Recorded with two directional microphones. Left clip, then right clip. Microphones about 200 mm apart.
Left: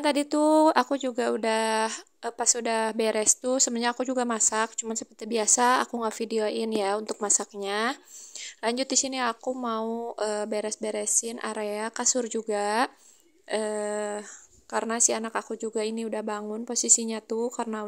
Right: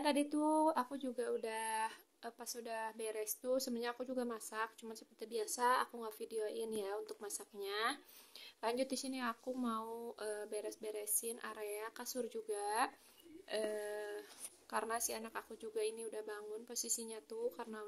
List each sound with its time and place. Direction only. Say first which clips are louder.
0.0 s speech: left 12 dB; 40° left (ahead or behind)